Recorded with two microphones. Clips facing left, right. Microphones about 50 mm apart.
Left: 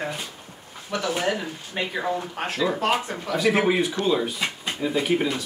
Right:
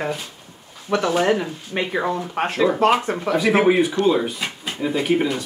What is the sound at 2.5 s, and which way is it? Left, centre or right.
Speech, right.